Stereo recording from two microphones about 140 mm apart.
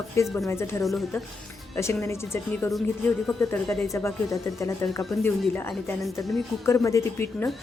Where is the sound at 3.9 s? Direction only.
20° left (ahead or behind).